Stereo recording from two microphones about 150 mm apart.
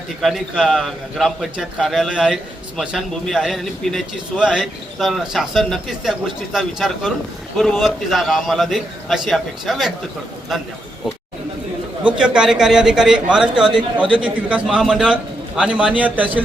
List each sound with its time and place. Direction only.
0.2 s a man's voice: centre (ahead or behind)
12.0 s a man's voice: 5° right (ahead or behind)